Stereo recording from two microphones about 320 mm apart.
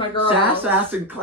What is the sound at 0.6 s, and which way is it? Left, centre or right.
Speech, centre.